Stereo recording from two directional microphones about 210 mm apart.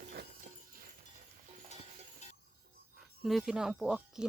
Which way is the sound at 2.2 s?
30° left (ahead or behind).